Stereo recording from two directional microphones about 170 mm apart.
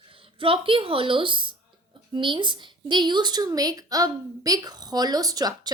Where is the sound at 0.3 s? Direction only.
30° right (ahead or behind).